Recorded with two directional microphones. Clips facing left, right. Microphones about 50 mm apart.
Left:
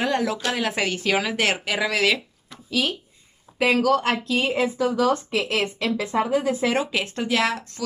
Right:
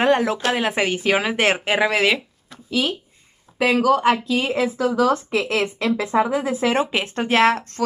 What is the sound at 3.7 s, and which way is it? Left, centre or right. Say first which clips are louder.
Speech: right 6 dB; centre.